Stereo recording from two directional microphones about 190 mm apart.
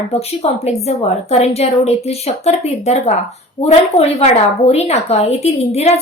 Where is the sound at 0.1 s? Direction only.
35° left (ahead or behind).